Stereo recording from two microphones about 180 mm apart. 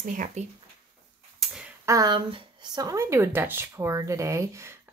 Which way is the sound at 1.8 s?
20° right (ahead or behind).